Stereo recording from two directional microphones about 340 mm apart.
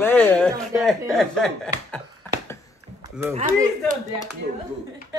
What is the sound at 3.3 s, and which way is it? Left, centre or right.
Speech, right.